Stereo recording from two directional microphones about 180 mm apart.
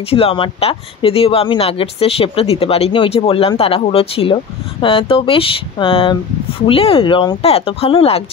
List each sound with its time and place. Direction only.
0.1 s speech: 30° left (ahead or behind)